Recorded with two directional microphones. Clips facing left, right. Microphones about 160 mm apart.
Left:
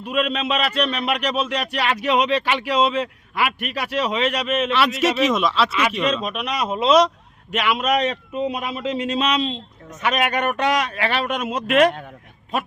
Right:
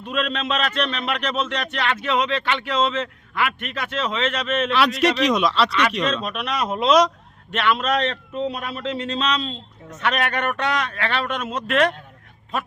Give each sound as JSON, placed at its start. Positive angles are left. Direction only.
{"t": 0.0, "sound": "a man's voice", "side_deg": 10}